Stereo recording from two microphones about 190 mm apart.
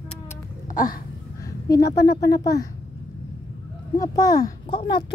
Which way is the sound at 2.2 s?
20° left (ahead or behind).